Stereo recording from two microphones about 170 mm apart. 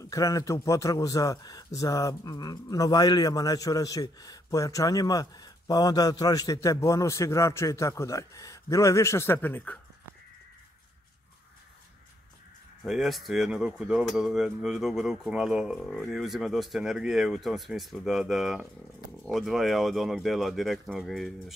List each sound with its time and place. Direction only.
0.0 s speech: 20° left (ahead or behind)
12.8 s speech: centre (ahead or behind)